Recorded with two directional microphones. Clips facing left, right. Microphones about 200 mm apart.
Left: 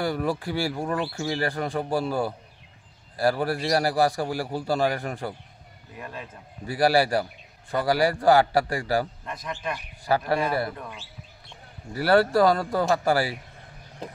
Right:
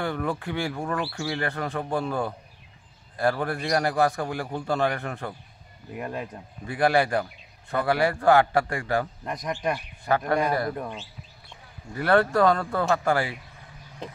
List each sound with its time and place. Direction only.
0.1 s a man's voice: 10° left (ahead or behind)
0.4 s a man's voice: 35° left (ahead or behind)
0.9 s speech: 20° left (ahead or behind)
1.3 s a man's voice: 35° left (ahead or behind)
1.7 s a man's voice: 10° left (ahead or behind)
3.4 s a man's voice: 30° left (ahead or behind)
5.9 s speech: 25° right (ahead or behind)
6.6 s a man's voice: 35° left (ahead or behind)
9.3 s speech: 15° right (ahead or behind)
10.0 s speech: 30° left (ahead or behind)
10.8 s speech: 25° right (ahead or behind)
11.9 s a man's voice: 35° left (ahead or behind)
12.5 s a man's voice: 10° left (ahead or behind)
12.8 s a man's voice: 35° left (ahead or behind)